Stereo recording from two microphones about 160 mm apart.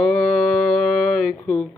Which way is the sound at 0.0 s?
5° left (ahead or behind).